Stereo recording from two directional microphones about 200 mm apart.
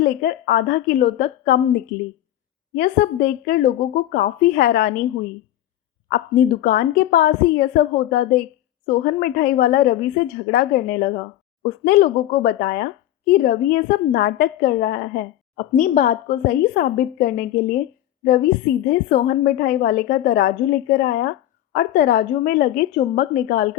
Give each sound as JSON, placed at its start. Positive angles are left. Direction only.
{"t": 0.0, "sound": "a woman's voice", "side_deg": 50}
{"t": 6.1, "sound": "a woman's voice", "side_deg": 50}